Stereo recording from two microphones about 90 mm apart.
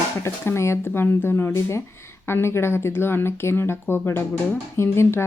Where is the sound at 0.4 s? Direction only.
30° left (ahead or behind).